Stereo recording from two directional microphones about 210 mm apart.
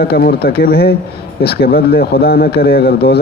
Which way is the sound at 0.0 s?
50° left (ahead or behind).